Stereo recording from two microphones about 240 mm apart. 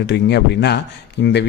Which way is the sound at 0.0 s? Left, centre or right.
Left.